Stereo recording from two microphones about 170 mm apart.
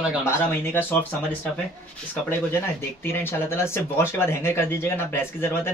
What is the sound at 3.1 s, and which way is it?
Speech, 15° left (ahead or behind).